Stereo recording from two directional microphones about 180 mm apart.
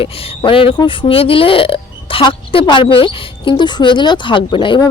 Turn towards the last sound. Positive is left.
turn(degrees=25)  # may be behind; listen again after turning